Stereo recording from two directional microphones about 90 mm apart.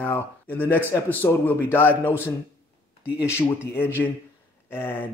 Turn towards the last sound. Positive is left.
turn(degrees=25)  # may be behind; listen again after turning